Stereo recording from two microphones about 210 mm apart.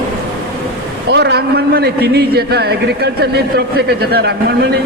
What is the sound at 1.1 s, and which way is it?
A man's voice, 50° right (ahead or behind).